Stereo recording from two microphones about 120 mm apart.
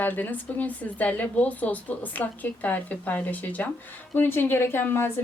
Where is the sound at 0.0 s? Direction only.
15° left (ahead or behind).